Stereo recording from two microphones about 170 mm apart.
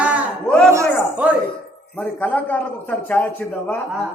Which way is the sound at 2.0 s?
10° left (ahead or behind).